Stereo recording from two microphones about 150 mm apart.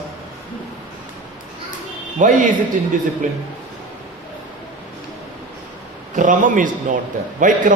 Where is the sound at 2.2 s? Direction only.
60° right (ahead or behind).